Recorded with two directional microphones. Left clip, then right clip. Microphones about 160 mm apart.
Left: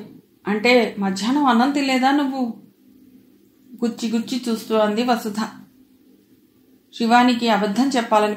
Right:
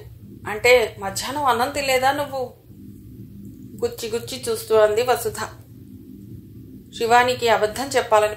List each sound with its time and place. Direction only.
0.5 s speech: 35° right (ahead or behind)
3.8 s speech: 35° right (ahead or behind)
6.9 s speech: 35° right (ahead or behind)